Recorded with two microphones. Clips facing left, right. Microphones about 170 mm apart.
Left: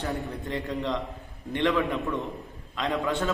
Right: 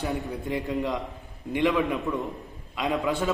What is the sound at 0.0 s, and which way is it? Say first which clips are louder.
A man's voice: right 2 dB; centre (ahead or behind).